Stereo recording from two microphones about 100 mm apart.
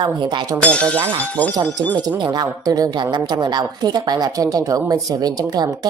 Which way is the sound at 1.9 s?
45° right (ahead or behind).